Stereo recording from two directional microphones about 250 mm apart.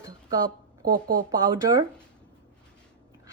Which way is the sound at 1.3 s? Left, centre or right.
Centre.